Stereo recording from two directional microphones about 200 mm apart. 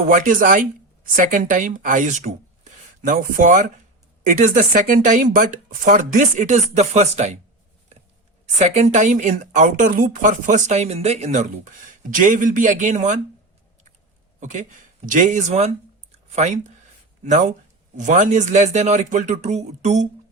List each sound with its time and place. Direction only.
0.1 s speech: 40° right (ahead or behind)
8.5 s speech: 35° right (ahead or behind)
14.3 s speech: 40° right (ahead or behind)